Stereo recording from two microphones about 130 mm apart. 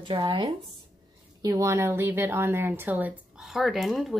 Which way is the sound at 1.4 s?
25° right (ahead or behind).